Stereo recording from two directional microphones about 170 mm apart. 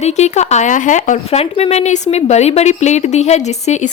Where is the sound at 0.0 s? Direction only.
40° left (ahead or behind).